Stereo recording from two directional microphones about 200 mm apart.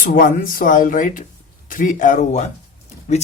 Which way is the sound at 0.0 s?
45° left (ahead or behind).